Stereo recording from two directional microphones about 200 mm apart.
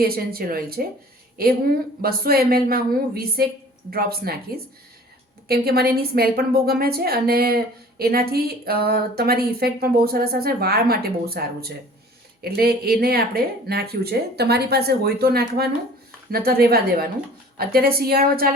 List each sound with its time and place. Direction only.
0.0 s a woman's voice: 50° right (ahead or behind)